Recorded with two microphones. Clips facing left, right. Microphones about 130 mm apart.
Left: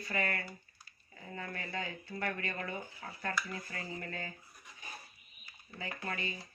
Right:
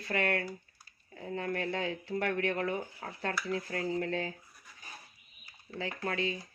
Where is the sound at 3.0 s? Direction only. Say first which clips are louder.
Right 4 dB; 60° right (ahead or behind).